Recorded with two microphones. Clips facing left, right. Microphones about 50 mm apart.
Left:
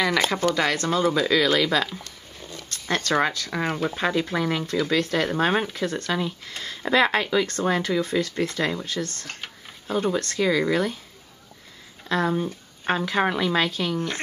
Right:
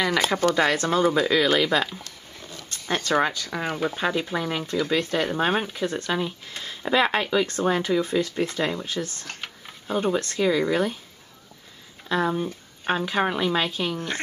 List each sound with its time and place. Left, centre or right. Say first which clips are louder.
0.0 s speech: left 1 dB; centre
0.3 s speech: right 2 dB; right
1.3 s speech: even; centre
2.7 s zipper: even; centre
3.4 s speech: left 1 dB; centre
9.3 s a sound: even; centre
9.9 s speech: even; centre
12.1 s speech: even; centre